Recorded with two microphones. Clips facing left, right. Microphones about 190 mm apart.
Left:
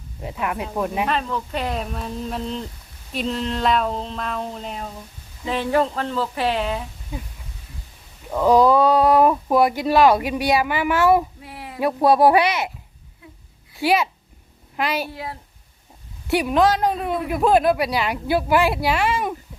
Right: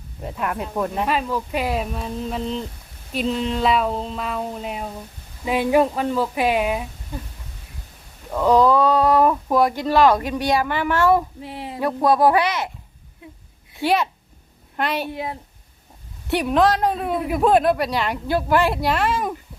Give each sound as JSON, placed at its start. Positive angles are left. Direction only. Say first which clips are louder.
{"t": 0.2, "sound": "a man's voice", "louder": "even", "side_deg": 0}
{"t": 1.0, "sound": "a man's voice", "louder": "right 1 dB", "side_deg": -5}
{"t": 8.3, "sound": "speech", "louder": "left 1 dB", "side_deg": 10}
{"t": 11.3, "sound": "a sound", "louder": "right 5 dB", "side_deg": -25}
{"t": 11.8, "sound": "speech", "louder": "left 2 dB", "side_deg": 10}
{"t": 13.8, "sound": "a man's voice", "louder": "left 1 dB", "side_deg": 5}
{"t": 15.1, "sound": "a sound", "louder": "right 4 dB", "side_deg": -20}
{"t": 16.2, "sound": "a man's voice", "louder": "even", "side_deg": 5}